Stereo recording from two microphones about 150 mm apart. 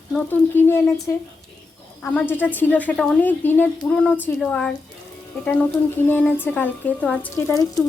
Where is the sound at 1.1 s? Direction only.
15° left (ahead or behind).